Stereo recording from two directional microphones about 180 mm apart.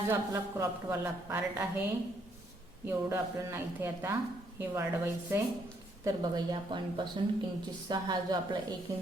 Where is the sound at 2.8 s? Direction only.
15° right (ahead or behind).